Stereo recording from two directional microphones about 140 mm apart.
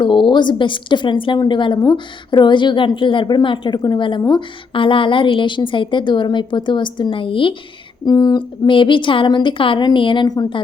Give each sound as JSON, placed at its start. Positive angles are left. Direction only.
{"t": 0.0, "sound": "a woman's voice", "side_deg": 35}
{"t": 8.0, "sound": "a woman's voice", "side_deg": 30}